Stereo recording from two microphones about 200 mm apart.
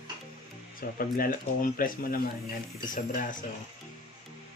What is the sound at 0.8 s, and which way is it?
Speech, 45° left (ahead or behind).